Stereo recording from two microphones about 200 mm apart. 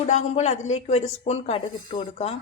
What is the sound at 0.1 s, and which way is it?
Speech, 35° left (ahead or behind).